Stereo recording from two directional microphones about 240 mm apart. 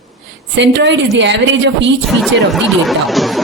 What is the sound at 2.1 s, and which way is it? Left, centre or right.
Speech, centre.